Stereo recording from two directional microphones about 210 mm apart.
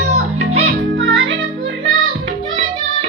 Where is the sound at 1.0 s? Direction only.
65° right (ahead or behind).